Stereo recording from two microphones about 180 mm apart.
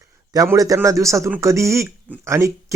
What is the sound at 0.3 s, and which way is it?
Speech, 20° right (ahead or behind).